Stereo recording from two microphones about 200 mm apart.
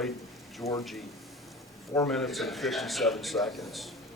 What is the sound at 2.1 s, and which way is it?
A man's voice, centre (ahead or behind).